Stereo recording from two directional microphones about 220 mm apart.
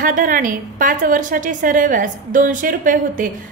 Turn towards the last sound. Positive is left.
turn(degrees=-40)  # may be behind; listen again after turning